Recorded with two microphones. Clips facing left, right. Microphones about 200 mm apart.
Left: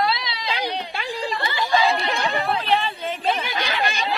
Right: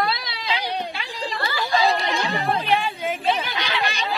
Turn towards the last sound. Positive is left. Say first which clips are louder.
# left 1 dB
turn(degrees=50)  # may be behind; listen again after turning